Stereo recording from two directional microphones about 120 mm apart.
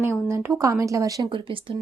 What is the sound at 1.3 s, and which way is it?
Speech, 45° right (ahead or behind).